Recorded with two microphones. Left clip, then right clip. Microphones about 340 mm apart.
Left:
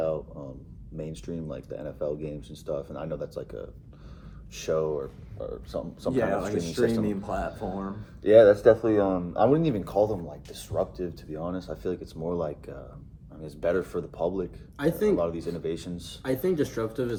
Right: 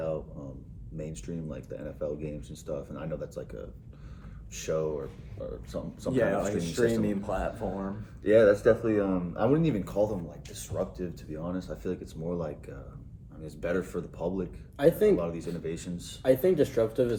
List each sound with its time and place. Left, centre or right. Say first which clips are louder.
0.0 s a sound: left 4 dB; centre
0.9 s speech: left 3 dB; centre
6.1 s speech: even; centre
8.2 s speech: left 5 dB; centre
14.8 s speech: right 3 dB; centre
15.2 s speech: left 5 dB; centre
16.2 s speech: right 3 dB; centre